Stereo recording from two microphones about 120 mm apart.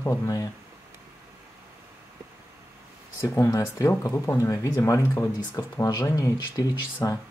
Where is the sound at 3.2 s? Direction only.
25° left (ahead or behind).